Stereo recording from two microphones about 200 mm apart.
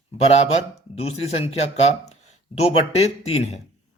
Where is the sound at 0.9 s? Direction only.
30° left (ahead or behind).